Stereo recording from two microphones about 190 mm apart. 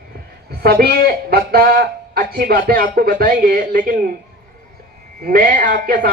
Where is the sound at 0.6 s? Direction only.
55° right (ahead or behind).